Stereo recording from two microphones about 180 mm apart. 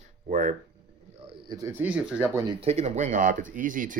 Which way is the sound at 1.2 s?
20° right (ahead or behind).